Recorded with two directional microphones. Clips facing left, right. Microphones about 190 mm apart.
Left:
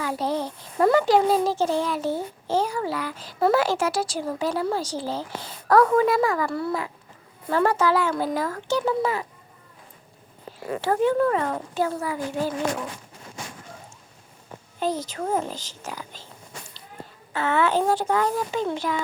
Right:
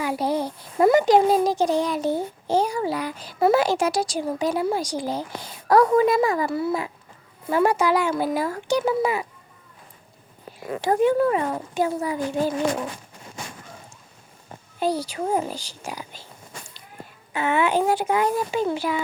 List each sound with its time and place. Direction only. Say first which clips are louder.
0.0 s a child's voice: right 2 dB; 10° right (ahead or behind)
10.6 s a child's voice: right 2 dB; 15° right (ahead or behind)
14.8 s a child's voice: right 2 dB; 10° right (ahead or behind)
17.3 s a child's voice: right 1 dB; 15° right (ahead or behind)